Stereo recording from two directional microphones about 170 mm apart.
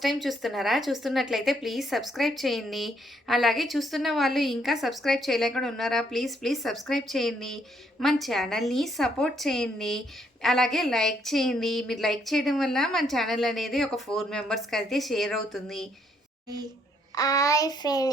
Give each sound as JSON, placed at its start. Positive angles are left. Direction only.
{"t": 0.0, "sound": "speech", "side_deg": 0}
{"t": 17.2, "sound": "a child's voice", "side_deg": 20}